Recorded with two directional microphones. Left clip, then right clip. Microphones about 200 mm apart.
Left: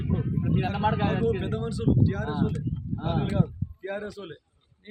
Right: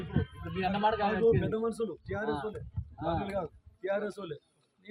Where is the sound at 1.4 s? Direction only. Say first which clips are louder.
Left 2 dB; 20° left (ahead or behind).